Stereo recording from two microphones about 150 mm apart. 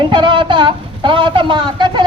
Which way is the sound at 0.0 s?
30° right (ahead or behind).